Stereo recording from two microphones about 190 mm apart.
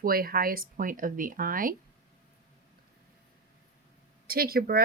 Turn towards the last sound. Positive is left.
turn(degrees=-50)  # may be behind; listen again after turning